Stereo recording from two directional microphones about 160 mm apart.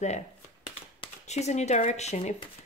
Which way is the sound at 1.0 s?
45° left (ahead or behind).